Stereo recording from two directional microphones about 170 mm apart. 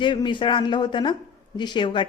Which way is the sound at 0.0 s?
30° left (ahead or behind).